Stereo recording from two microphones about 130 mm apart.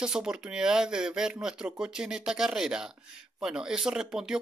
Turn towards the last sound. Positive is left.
turn(degrees=-5)  # may be behind; listen again after turning